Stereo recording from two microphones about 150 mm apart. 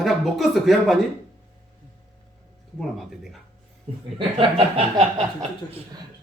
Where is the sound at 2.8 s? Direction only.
Centre (ahead or behind).